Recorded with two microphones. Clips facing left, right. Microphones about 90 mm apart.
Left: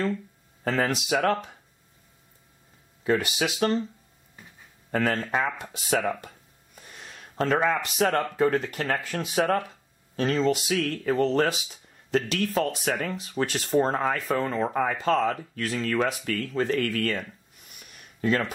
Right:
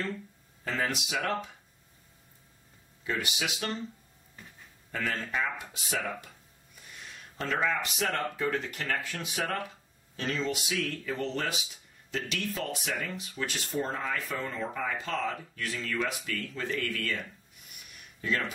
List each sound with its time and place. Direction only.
0.7 s speech: 50° left (ahead or behind)
3.0 s speech: 45° left (ahead or behind)
4.9 s speech: 45° left (ahead or behind)
6.2 s a sound: 40° left (ahead or behind)
8.0 s speech: 45° left (ahead or behind)
14.2 s speech: 65° left (ahead or behind)
14.5 s speech: 50° left (ahead or behind)